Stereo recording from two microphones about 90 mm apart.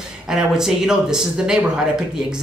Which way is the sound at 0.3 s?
5° right (ahead or behind).